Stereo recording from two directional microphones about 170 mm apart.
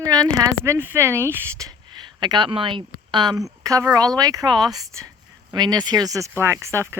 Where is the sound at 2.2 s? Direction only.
25° right (ahead or behind).